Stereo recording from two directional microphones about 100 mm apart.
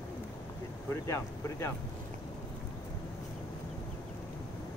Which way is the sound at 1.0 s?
30° left (ahead or behind).